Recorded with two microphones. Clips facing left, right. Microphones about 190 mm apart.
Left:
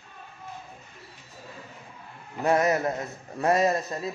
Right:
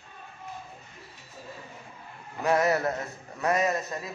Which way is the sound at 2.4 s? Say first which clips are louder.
Left 1 dB; 20° left (ahead or behind).